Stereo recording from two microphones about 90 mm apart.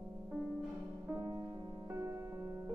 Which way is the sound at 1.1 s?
50° right (ahead or behind).